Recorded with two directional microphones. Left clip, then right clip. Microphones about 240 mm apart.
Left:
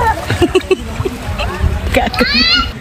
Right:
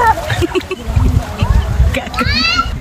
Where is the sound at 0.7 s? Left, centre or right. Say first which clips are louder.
Left 9 dB; left.